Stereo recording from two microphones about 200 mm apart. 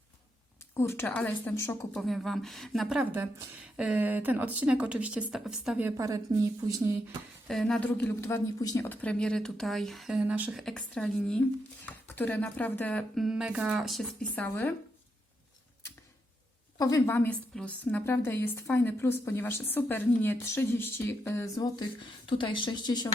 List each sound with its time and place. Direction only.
0.7 s speech: 10° left (ahead or behind)
1.9 s speech: centre (ahead or behind)
6.0 s a woman's voice: 15° right (ahead or behind)
7.4 s speech: centre (ahead or behind)
16.7 s speech: 15° left (ahead or behind)